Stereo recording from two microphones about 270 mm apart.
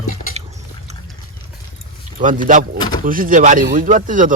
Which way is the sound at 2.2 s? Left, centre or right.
Right.